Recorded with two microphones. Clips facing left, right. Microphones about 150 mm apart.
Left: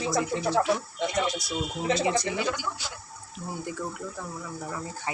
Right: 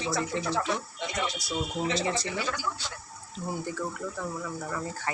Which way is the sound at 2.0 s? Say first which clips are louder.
Left 4 dB; 15° left (ahead or behind).